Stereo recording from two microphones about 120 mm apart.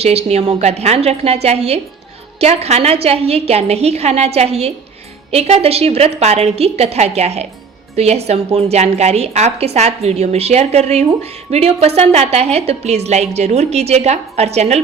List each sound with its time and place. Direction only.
0.0 s a woman's voice: 60° right (ahead or behind)